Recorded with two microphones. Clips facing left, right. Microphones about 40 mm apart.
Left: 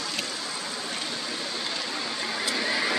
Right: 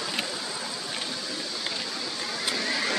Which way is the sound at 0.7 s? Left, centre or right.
Centre.